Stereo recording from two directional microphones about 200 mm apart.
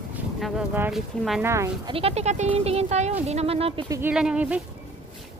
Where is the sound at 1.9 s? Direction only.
30° right (ahead or behind).